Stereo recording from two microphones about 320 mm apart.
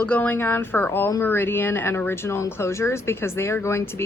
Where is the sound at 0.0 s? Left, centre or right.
Centre.